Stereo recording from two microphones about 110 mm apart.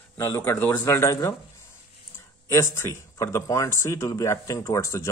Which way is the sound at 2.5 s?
25° left (ahead or behind).